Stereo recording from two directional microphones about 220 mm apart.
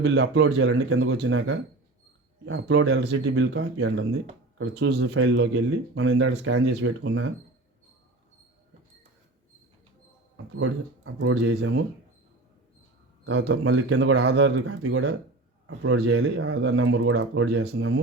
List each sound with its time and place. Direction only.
0.0 s speech: 55° right (ahead or behind)
10.3 s speech: 65° right (ahead or behind)
13.2 s speech: 55° right (ahead or behind)
17.7 s speech: 70° right (ahead or behind)